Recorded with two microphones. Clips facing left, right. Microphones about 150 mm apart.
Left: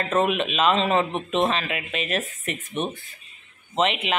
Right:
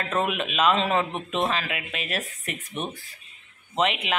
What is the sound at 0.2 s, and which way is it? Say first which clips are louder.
A woman's voice: left 1 dB; 5° right (ahead or behind).